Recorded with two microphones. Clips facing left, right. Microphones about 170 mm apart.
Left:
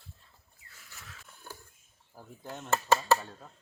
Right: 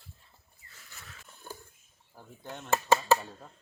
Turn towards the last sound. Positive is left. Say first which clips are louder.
# right 1 dB
turn(degrees=-10)  # may be behind; listen again after turning